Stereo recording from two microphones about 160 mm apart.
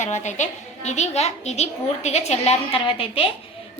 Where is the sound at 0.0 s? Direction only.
45° left (ahead or behind).